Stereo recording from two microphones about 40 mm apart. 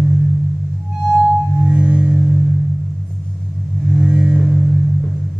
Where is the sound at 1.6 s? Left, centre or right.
Right.